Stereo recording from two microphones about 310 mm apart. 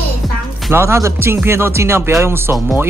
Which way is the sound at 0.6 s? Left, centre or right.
Centre.